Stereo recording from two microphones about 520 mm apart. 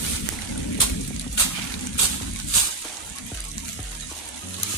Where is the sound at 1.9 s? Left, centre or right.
Left.